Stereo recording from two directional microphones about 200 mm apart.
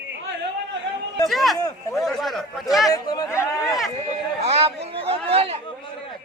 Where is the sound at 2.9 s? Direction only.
20° left (ahead or behind).